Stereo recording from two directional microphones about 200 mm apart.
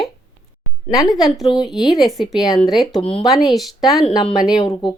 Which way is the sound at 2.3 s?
20° left (ahead or behind).